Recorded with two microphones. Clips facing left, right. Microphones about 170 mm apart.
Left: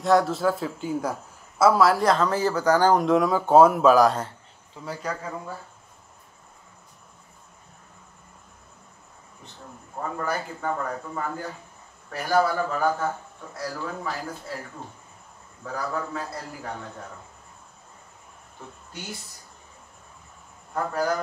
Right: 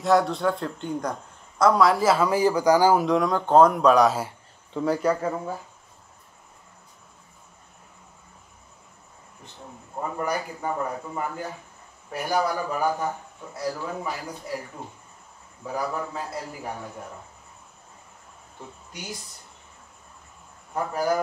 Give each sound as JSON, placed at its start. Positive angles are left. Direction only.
{"t": 0.0, "sound": "a man's voice", "side_deg": 0}
{"t": 5.2, "sound": "speech", "side_deg": -45}
{"t": 9.9, "sound": "a man's voice", "side_deg": -15}
{"t": 20.7, "sound": "a man's voice", "side_deg": -15}